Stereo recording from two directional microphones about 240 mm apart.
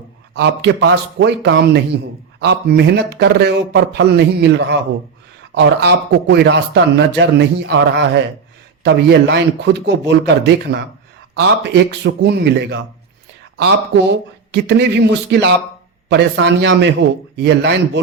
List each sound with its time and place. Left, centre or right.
0.3 s speech: right